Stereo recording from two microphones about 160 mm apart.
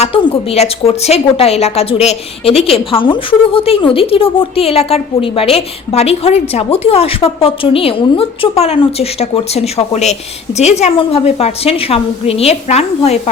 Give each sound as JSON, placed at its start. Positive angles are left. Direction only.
{"t": 0.0, "sound": "a woman's voice", "side_deg": 40}